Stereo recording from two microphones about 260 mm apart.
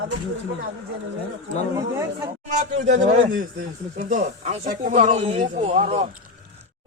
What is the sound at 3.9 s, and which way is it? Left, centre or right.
Speech, right.